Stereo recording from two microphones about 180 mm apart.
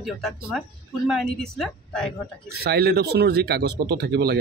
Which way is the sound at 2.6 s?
65° right (ahead or behind).